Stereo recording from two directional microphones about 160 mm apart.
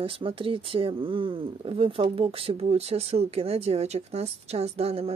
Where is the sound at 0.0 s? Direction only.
35° right (ahead or behind).